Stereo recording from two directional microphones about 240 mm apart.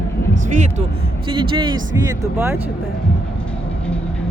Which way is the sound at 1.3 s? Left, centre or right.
Centre.